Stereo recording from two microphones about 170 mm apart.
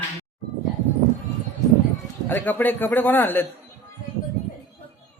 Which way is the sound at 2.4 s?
10° left (ahead or behind).